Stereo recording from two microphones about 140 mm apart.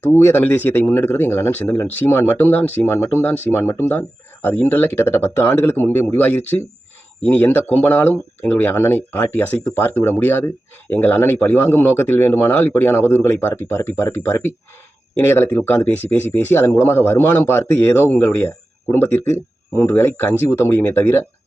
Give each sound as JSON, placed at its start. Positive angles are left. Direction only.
{"t": 0.0, "sound": "speech", "side_deg": 10}